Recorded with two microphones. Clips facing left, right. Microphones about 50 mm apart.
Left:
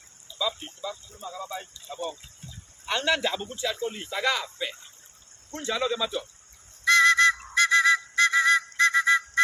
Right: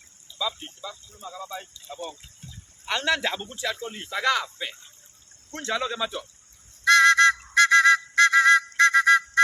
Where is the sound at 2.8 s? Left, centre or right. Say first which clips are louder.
Right 1 dB; right.